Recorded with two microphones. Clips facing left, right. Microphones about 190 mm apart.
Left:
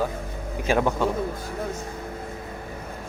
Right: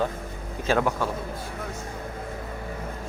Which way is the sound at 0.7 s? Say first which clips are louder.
Left 2 dB; 20° left (ahead or behind).